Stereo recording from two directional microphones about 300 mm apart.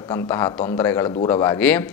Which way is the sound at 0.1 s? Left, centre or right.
Centre.